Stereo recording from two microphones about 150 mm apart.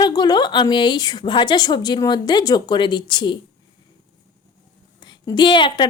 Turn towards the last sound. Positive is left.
turn(degrees=30)  # may be behind; listen again after turning